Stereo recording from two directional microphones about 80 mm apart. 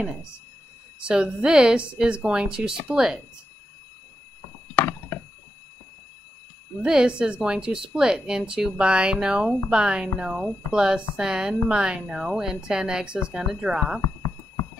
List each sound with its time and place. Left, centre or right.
1.0 s speech: centre
4.7 s a sound: left
6.8 s speech: centre